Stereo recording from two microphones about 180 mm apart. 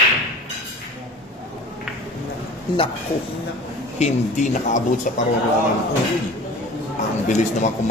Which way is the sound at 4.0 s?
40° left (ahead or behind).